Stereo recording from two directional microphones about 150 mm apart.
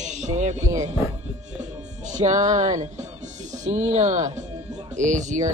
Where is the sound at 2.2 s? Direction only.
55° right (ahead or behind).